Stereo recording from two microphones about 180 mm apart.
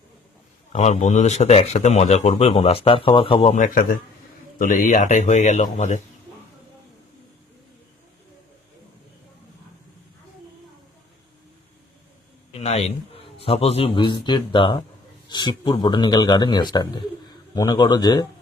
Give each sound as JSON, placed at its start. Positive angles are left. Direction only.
{"t": 0.7, "sound": "speech", "side_deg": 40}
{"t": 3.5, "sound": "speech", "side_deg": 45}
{"t": 12.5, "sound": "a man's voice", "side_deg": 35}